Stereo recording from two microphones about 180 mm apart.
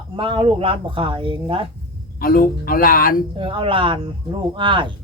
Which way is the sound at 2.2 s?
55° left (ahead or behind).